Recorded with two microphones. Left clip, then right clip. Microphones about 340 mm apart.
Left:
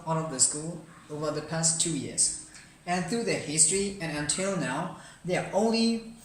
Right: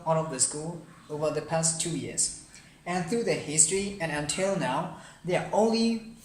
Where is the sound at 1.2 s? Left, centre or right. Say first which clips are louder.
Right 3 dB; right.